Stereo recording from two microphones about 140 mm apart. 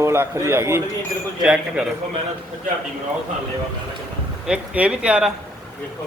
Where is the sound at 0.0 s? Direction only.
20° right (ahead or behind).